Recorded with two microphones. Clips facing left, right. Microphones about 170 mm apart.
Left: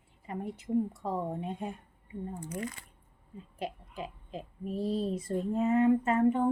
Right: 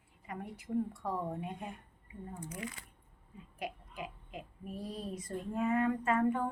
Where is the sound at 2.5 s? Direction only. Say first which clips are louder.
Left 5 dB; 40° left (ahead or behind).